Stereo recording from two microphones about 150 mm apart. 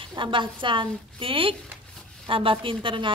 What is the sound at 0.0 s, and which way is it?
Female singing, 35° right (ahead or behind).